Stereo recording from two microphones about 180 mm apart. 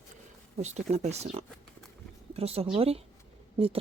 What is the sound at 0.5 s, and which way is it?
Speech, 40° right (ahead or behind).